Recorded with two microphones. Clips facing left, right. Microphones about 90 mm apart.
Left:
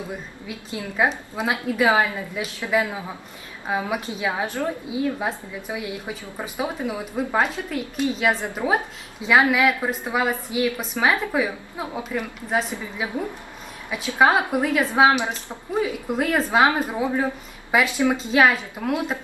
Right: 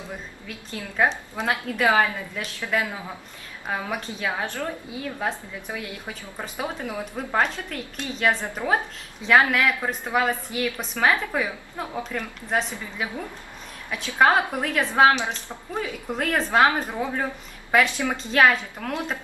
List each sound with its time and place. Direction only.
0.4 s a woman's voice: 10° left (ahead or behind)
13.9 s a woman's voice: 10° left (ahead or behind)